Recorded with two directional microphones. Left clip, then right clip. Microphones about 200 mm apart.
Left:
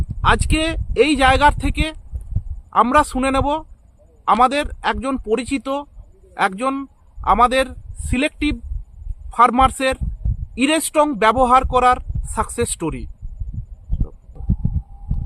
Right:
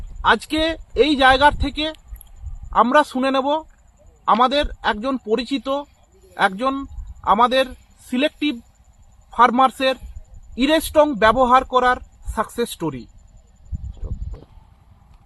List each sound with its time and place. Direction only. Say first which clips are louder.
0.2 s a man's voice: even; 15° left (ahead or behind)